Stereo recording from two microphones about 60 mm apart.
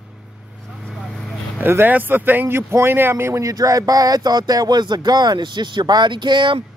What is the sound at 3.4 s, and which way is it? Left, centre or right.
Speech, right.